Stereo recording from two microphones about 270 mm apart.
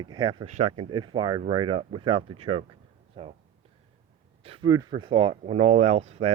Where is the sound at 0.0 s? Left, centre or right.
Centre.